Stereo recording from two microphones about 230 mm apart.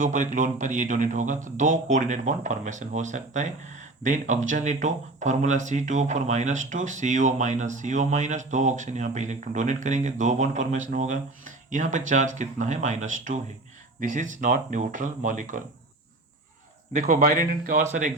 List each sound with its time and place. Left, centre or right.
0.0 s speech: right
16.9 s speech: right